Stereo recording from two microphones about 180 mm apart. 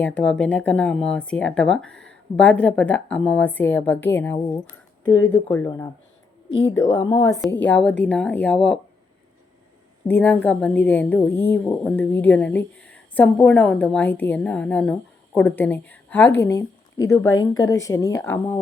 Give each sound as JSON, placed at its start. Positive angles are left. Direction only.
{"t": 0.0, "sound": "a woman's voice", "side_deg": 5}
{"t": 5.0, "sound": "speech", "side_deg": 90}
{"t": 5.6, "sound": "a woman's voice", "side_deg": 20}
{"t": 10.1, "sound": "a woman's voice", "side_deg": 10}